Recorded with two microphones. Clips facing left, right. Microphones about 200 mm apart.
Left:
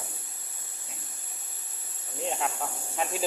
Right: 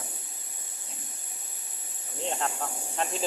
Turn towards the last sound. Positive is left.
turn(degrees=5)  # may be behind; listen again after turning